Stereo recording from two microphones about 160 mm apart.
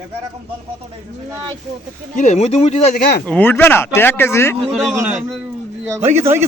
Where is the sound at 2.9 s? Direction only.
75° left (ahead or behind).